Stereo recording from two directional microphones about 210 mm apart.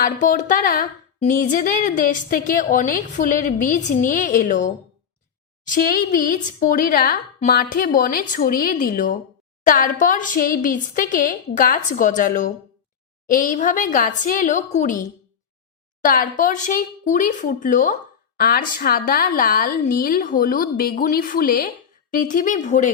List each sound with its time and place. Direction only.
0.0 s a woman's voice: 40° left (ahead or behind)